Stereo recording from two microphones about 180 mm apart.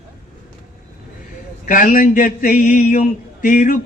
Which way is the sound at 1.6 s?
45° left (ahead or behind).